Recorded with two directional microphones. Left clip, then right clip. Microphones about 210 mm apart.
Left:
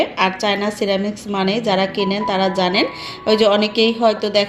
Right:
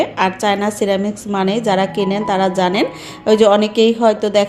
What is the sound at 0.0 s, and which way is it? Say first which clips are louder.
Speech: right 1 dB; 15° right (ahead or behind).